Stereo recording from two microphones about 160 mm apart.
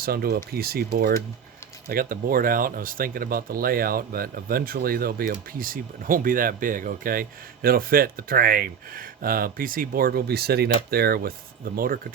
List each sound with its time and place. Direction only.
0.0 s speech: 70° right (ahead or behind)